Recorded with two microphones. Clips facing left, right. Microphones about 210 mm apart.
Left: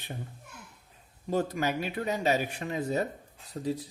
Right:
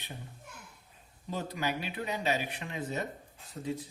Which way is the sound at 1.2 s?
45° left (ahead or behind).